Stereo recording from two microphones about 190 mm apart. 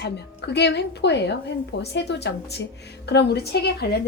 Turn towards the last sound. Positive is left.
turn(degrees=60)  # may be behind; listen again after turning